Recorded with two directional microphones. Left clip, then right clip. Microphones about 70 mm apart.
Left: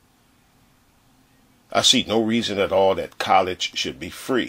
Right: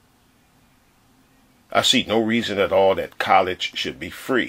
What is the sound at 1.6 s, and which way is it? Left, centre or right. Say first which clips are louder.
Speech: even; left.